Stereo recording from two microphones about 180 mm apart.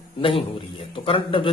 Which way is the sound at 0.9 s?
30° left (ahead or behind).